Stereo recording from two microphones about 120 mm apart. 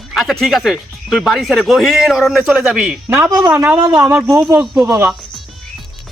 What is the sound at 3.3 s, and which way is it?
Speech, 30° right (ahead or behind).